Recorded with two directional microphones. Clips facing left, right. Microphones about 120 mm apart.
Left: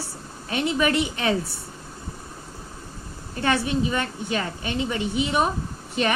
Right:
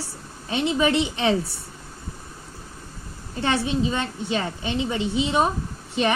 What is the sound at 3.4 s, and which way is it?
A woman's voice, 25° right (ahead or behind).